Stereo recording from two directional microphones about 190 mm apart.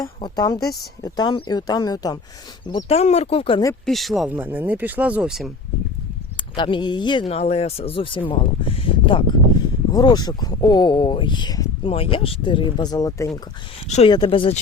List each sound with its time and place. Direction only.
0.0 s speech: 20° left (ahead or behind)
3.8 s speech: centre (ahead or behind)
6.3 s speech: 25° left (ahead or behind)
13.8 s speech: 35° left (ahead or behind)